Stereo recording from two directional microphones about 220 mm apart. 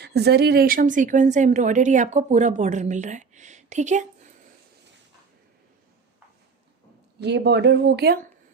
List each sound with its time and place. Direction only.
0.0 s speech: 50° right (ahead or behind); by 4.0 s 30° right (ahead or behind)
7.2 s speech: 50° right (ahead or behind)